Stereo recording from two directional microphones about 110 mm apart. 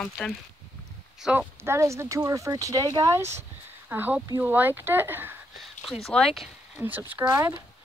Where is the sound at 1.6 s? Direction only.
25° right (ahead or behind).